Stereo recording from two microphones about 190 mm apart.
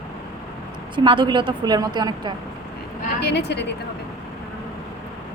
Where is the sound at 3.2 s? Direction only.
60° left (ahead or behind).